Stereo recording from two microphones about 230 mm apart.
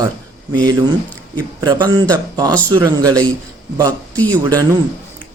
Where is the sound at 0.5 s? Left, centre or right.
Centre.